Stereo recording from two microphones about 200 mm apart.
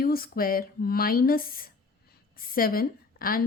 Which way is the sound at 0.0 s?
50° left (ahead or behind).